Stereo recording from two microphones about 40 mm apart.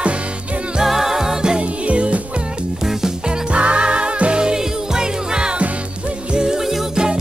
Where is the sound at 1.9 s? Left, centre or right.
Right.